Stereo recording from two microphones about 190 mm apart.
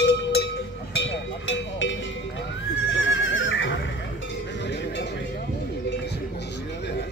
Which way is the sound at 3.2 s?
85° left.